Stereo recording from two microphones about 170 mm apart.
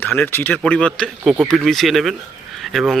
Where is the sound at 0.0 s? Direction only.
10° left (ahead or behind).